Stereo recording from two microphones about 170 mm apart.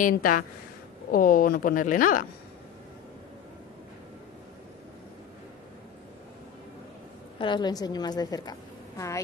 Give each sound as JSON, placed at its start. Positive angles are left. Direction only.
{"t": 0.0, "sound": "speech", "side_deg": 55}
{"t": 7.3, "sound": "a woman's voice", "side_deg": 25}